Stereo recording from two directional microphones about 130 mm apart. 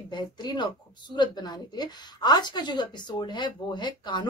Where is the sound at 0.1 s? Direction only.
35° left (ahead or behind).